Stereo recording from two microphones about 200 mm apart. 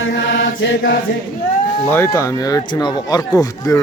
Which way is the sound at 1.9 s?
10° left (ahead or behind).